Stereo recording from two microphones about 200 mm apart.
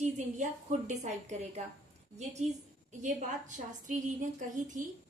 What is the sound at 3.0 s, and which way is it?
A woman's voice, 40° right (ahead or behind).